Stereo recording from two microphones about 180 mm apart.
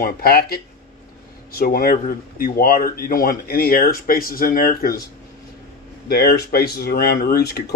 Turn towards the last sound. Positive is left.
turn(degrees=60)  # may be behind; listen again after turning